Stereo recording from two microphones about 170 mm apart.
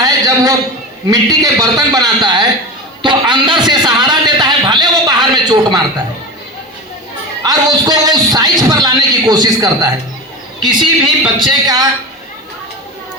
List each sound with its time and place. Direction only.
0.0 s a sound: 20° right (ahead or behind)
1.1 s a man's voice: 20° right (ahead or behind)
7.4 s a man's voice: 25° right (ahead or behind)